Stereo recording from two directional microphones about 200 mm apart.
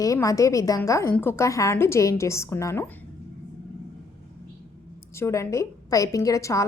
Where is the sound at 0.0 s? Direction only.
15° left (ahead or behind).